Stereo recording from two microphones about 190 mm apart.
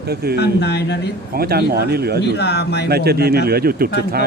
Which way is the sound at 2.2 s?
60° left (ahead or behind).